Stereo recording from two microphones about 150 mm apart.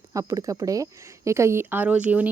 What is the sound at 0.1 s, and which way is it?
Speech, 20° right (ahead or behind).